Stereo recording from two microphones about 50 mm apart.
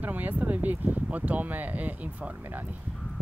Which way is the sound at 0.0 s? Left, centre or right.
Right.